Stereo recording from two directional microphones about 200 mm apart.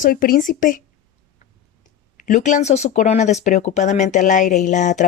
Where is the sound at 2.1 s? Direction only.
40° left (ahead or behind).